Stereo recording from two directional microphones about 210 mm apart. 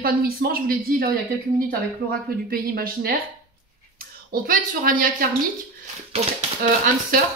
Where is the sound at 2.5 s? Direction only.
45° right (ahead or behind).